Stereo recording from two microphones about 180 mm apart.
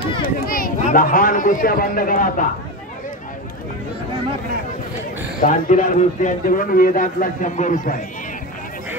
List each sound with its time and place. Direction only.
0.0 s a sound: 30° left (ahead or behind)
0.5 s a man's voice: 50° left (ahead or behind)
5.4 s a man's voice: 50° left (ahead or behind)